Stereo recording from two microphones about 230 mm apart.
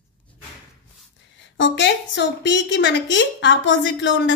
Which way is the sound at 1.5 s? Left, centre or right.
Left.